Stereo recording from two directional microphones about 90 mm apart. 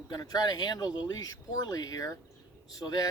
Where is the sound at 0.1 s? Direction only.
45° left (ahead or behind).